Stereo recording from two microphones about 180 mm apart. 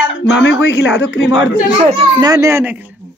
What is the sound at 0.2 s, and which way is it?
A man's voice, 90° left.